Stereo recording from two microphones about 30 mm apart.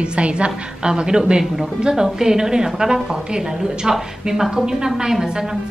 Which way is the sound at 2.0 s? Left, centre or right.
Centre.